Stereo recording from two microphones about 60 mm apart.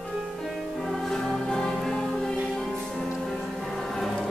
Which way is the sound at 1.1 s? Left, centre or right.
Centre.